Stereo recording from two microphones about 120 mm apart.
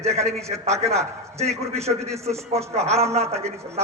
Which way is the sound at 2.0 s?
25° right (ahead or behind).